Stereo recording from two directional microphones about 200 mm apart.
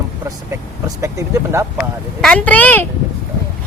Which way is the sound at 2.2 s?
5° left (ahead or behind).